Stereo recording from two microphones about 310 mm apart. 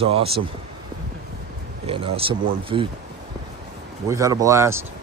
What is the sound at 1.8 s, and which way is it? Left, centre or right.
Speech, centre.